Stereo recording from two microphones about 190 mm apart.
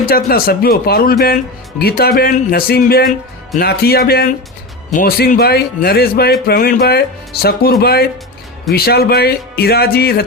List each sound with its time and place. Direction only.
0.0 s speech: 50° left (ahead or behind)